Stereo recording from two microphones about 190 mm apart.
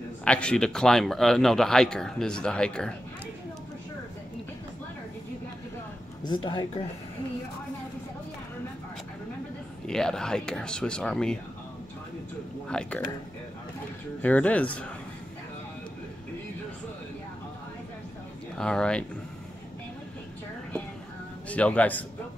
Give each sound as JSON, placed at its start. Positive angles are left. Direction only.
{"t": 0.2, "sound": "speech", "side_deg": 5}
{"t": 6.2, "sound": "speech", "side_deg": 25}
{"t": 9.8, "sound": "speech", "side_deg": 5}
{"t": 12.6, "sound": "speech", "side_deg": 5}
{"t": 14.2, "sound": "speech", "side_deg": 5}
{"t": 18.6, "sound": "speech", "side_deg": 5}
{"t": 21.5, "sound": "speech", "side_deg": 5}